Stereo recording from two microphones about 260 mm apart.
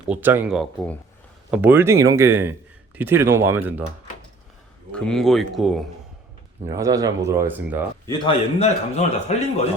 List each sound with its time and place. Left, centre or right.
0.1 s speech: centre
4.9 s speech: centre
6.7 s speech: centre
8.0 s a man's voice: centre